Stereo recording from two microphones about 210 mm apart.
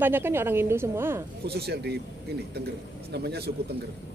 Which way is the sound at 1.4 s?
50° right (ahead or behind).